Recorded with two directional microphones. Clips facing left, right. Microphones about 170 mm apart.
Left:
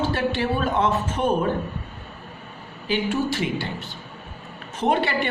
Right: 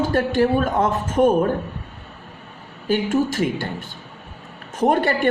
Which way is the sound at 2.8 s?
45° right (ahead or behind).